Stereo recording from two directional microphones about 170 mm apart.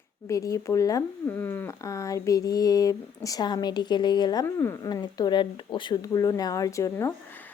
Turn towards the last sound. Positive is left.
turn(degrees=15)  # may be behind; listen again after turning